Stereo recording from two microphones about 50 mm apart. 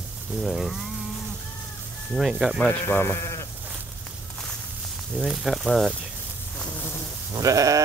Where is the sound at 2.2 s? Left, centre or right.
Centre.